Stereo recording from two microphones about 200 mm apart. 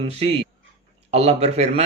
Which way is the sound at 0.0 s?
30° right (ahead or behind).